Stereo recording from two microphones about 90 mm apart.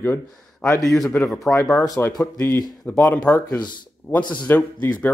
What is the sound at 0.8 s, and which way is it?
Speech, centre (ahead or behind).